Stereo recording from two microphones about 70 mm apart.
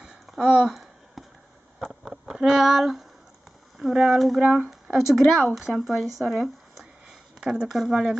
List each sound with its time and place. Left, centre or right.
0.0 s a sound: centre
3.8 s speech: centre
4.4 s speech: right
4.6 s speech: centre